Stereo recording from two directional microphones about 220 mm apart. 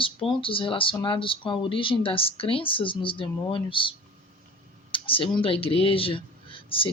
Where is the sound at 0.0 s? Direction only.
25° left (ahead or behind).